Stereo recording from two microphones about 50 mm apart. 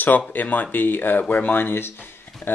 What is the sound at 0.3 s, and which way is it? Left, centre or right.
Speech, left.